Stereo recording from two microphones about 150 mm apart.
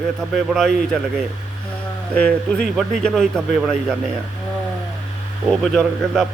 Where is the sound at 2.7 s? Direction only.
Centre (ahead or behind).